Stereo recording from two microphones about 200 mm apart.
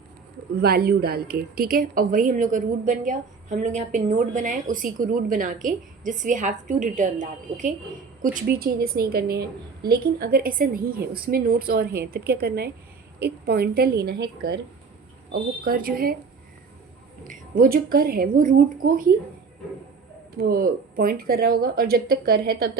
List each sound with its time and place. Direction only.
0.6 s a woman's voice: 50° right (ahead or behind)
17.2 s a woman's voice: 45° right (ahead or behind)
20.4 s a woman's voice: 45° right (ahead or behind)